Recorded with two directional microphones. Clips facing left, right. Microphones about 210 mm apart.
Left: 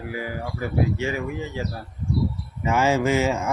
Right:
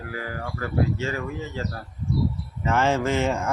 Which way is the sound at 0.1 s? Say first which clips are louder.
Left 2 dB; 15° left (ahead or behind).